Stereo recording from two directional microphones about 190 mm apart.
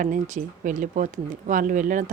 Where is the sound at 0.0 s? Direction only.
40° right (ahead or behind).